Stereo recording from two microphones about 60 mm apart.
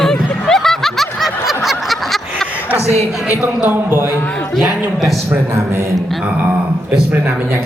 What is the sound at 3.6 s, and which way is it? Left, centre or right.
Speech, right.